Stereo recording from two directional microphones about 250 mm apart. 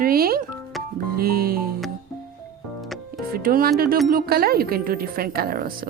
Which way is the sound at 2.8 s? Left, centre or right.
Centre.